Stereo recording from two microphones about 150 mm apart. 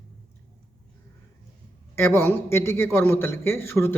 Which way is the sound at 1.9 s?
15° left (ahead or behind).